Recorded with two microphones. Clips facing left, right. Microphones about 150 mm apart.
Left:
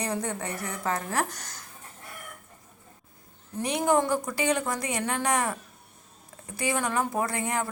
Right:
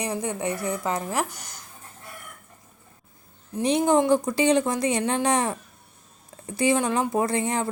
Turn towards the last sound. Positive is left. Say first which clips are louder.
# right 5 dB
turn(degrees=-20)  # may be behind; listen again after turning